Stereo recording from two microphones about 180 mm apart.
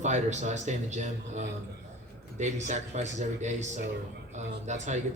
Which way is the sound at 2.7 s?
40° right (ahead or behind).